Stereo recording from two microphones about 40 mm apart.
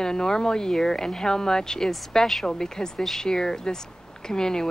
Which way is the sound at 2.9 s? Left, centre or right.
Centre.